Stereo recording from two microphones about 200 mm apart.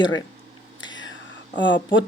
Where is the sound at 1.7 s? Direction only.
65° left (ahead or behind).